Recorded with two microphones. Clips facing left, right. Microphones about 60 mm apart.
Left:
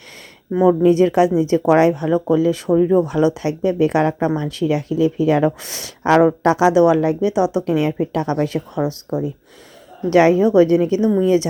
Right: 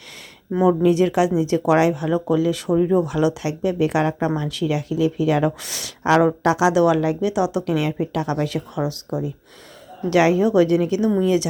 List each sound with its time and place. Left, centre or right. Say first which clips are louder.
0.8 s speech: left 4 dB; left